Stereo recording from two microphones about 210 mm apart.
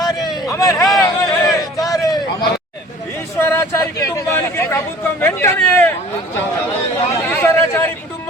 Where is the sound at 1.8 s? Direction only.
15° left (ahead or behind).